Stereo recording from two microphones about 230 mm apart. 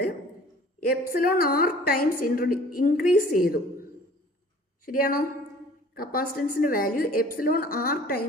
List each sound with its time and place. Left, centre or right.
0.8 s a woman's voice: left
4.9 s a woman's voice: left